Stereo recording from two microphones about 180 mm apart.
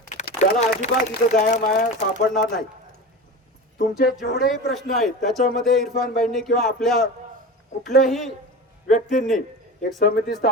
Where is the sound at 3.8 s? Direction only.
60° left (ahead or behind).